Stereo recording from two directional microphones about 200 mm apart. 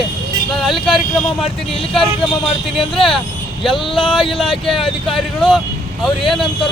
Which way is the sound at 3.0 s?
25° left (ahead or behind).